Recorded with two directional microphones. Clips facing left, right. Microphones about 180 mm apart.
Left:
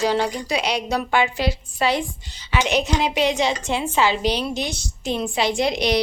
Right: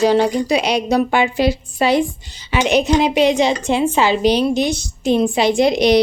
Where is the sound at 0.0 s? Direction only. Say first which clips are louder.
Right 7 dB; 20° right (ahead or behind).